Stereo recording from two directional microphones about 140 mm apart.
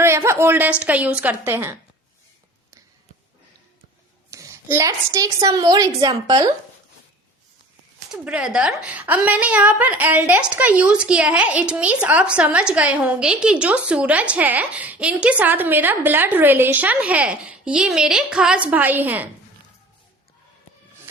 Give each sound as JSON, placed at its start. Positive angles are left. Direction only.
{"t": 0.0, "sound": "a woman's voice", "side_deg": -20}
{"t": 4.3, "sound": "a woman's voice", "side_deg": -20}
{"t": 8.1, "sound": "a woman's voice", "side_deg": -5}